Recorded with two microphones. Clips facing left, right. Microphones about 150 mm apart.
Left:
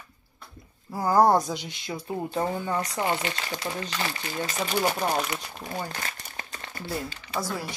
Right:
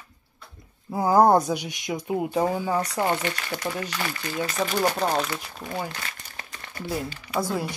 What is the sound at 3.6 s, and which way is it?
Speech, 25° left (ahead or behind).